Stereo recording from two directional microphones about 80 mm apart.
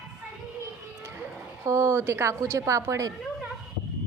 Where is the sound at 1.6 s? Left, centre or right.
Right.